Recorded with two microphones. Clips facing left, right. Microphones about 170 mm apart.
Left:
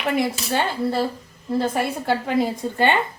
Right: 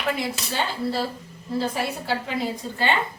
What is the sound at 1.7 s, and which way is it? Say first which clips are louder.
A woman's voice: left 4 dB; 50° left (ahead or behind).